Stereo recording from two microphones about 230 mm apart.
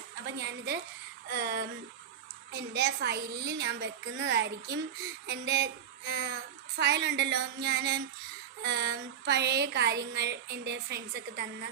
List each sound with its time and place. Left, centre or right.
0.3 s speech: right